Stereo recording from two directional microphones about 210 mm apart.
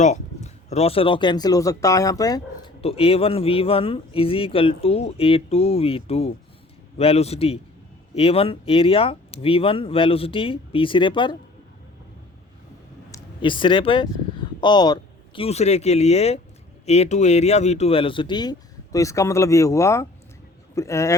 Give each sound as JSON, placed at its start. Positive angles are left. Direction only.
{"t": 0.0, "sound": "speech", "side_deg": 35}
{"t": 13.1, "sound": "speech", "side_deg": 25}